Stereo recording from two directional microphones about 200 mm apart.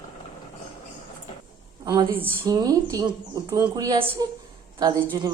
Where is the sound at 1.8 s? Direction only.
20° right (ahead or behind).